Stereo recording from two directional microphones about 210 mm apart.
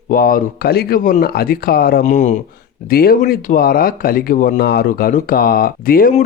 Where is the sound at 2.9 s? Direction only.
45° left (ahead or behind).